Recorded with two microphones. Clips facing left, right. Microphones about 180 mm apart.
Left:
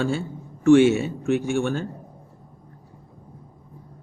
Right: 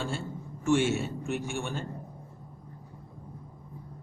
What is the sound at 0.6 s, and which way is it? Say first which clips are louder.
A man's voice: left 11 dB; 90° left.